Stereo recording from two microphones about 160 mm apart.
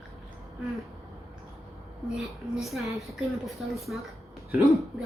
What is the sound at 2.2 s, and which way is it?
A woman's voice, centre (ahead or behind).